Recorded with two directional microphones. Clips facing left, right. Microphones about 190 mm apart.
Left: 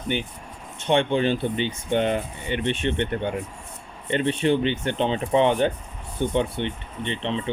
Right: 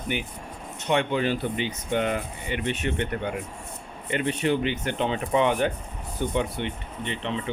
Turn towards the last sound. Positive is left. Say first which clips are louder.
# left 3 dB
turn(degrees=25)  # may be behind; listen again after turning